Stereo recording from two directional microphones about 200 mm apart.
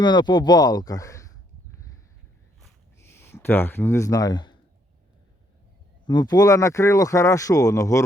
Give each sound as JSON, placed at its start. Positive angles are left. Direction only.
{"t": 0.0, "sound": "speech", "side_deg": 20}
{"t": 3.0, "sound": "speech", "side_deg": 10}
{"t": 6.1, "sound": "speech", "side_deg": 20}